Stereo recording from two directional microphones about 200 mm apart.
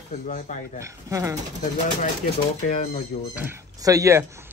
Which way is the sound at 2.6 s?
35° left (ahead or behind).